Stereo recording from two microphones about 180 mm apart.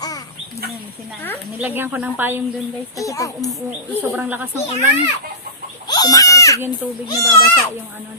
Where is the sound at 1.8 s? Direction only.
10° right (ahead or behind).